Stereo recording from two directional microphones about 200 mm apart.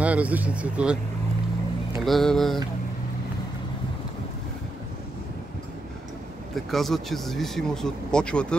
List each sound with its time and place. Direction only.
0.0 s speech: 5° right (ahead or behind)
2.0 s speech: centre (ahead or behind)
6.5 s speech: centre (ahead or behind)